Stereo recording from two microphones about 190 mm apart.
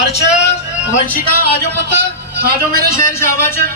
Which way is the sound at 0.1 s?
35° left (ahead or behind).